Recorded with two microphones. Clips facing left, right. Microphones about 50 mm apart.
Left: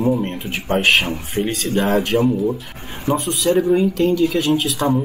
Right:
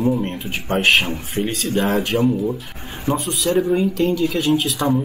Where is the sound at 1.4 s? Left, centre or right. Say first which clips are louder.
Left 2 dB; left.